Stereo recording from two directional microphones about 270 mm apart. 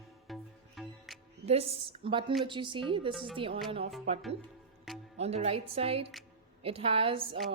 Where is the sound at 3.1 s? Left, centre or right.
Centre.